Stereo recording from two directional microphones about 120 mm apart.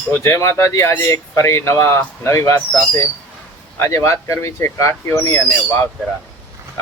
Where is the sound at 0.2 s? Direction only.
25° left (ahead or behind).